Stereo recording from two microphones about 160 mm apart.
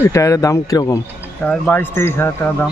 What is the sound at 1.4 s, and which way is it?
Speech, 10° left (ahead or behind).